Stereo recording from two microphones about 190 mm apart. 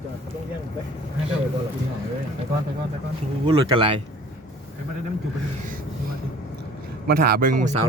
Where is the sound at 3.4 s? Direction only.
25° right (ahead or behind).